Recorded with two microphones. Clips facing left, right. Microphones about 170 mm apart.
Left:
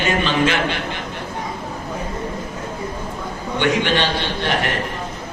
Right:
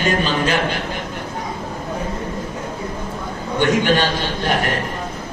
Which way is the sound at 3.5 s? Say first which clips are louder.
Right 2 dB; 45° right (ahead or behind).